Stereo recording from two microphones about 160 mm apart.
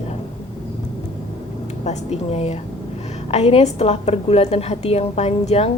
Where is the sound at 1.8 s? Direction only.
40° left (ahead or behind).